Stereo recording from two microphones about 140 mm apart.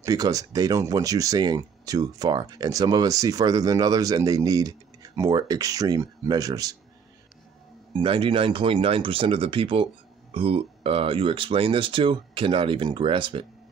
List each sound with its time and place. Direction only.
0.0 s speech: 25° right (ahead or behind)
8.0 s speech: 40° right (ahead or behind)